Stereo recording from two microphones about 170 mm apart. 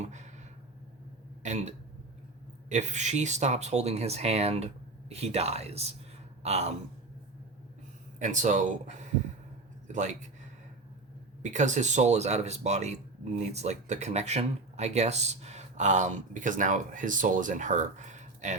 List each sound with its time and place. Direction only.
0.0 s a sound: 45° right (ahead or behind)
1.4 s throat clearing: 40° right (ahead or behind)
2.6 s speech: 45° right (ahead or behind)
8.2 s speech: 45° right (ahead or behind)
11.4 s speech: 45° right (ahead or behind)